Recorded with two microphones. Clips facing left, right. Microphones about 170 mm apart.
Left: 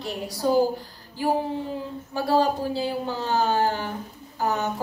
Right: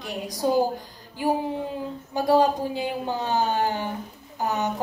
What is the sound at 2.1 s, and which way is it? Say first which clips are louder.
A woman's voice: right 2 dB; 15° right (ahead or behind).